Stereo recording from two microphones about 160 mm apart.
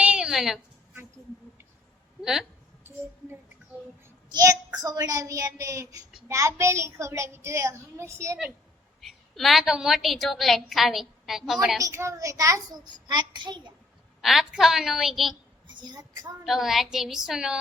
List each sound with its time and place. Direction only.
0.0 s a sound: 5° right (ahead or behind)
2.2 s a woman's voice: 5° right (ahead or behind)
4.3 s a child's voice: 25° right (ahead or behind)
9.0 s a woman's voice: centre (ahead or behind)
11.8 s a child's voice: 20° right (ahead or behind)
14.2 s a woman's voice: centre (ahead or behind)
15.6 s a child's voice: 25° right (ahead or behind)
16.4 s a woman's voice: centre (ahead or behind)